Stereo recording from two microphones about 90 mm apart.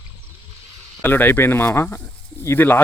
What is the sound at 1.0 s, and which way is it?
Speech, 20° left (ahead or behind).